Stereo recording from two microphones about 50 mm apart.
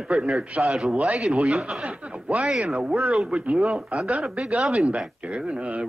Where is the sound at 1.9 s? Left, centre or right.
Right.